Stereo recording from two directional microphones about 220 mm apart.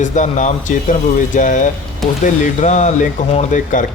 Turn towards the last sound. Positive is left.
turn(degrees=35)  # may be behind; listen again after turning